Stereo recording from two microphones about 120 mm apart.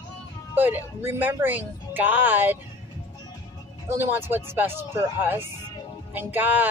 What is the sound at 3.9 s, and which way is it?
Speech, 20° right (ahead or behind).